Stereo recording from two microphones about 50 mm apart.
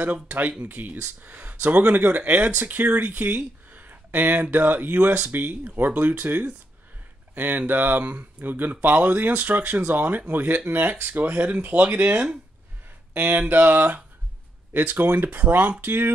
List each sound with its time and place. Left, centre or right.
0.0 s speech: right